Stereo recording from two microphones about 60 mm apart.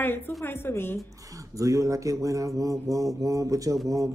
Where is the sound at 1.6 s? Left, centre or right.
Right.